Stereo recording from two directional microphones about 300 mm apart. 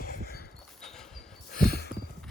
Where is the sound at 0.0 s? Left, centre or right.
Left.